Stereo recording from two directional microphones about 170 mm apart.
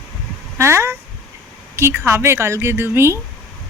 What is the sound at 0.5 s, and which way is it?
Speech, 15° right (ahead or behind).